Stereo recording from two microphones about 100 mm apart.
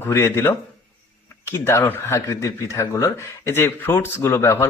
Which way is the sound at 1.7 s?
25° left (ahead or behind).